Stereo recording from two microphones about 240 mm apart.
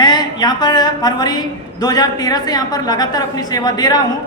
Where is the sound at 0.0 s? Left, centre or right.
Centre.